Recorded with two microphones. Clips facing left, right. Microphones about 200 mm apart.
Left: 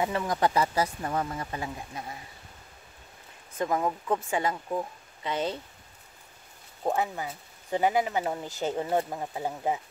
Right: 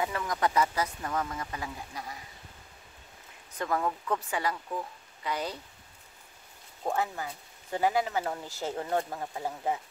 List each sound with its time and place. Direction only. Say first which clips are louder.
0.0 s speech: left 3 dB; 30° left (ahead or behind)
3.5 s speech: left 3 dB; 20° left (ahead or behind)
6.8 s speech: left 3 dB; 20° left (ahead or behind)